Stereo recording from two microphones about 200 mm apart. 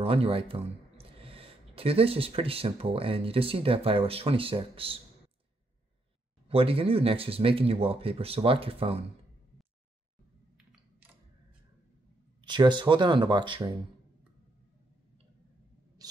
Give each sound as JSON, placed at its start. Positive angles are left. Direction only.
{"t": 0.0, "sound": "speech", "side_deg": -30}
{"t": 6.5, "sound": "speech", "side_deg": -30}
{"t": 12.4, "sound": "speech", "side_deg": -25}
{"t": 16.0, "sound": "owl", "side_deg": -20}